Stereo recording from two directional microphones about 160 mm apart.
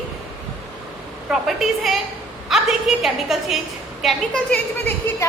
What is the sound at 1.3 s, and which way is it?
A woman's voice, centre (ahead or behind).